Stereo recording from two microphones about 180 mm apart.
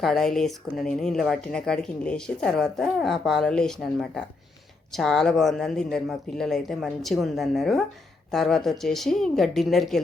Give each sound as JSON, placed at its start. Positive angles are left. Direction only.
{"t": 0.0, "sound": "speech", "side_deg": 0}